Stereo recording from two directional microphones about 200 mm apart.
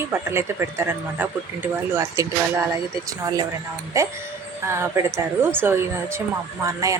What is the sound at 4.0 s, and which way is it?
Speech, 15° right (ahead or behind).